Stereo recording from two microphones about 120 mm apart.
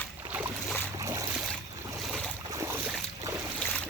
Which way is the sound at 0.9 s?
25° right (ahead or behind).